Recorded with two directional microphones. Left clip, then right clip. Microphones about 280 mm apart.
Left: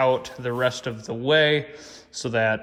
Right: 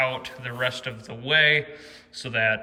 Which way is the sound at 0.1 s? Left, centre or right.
Centre.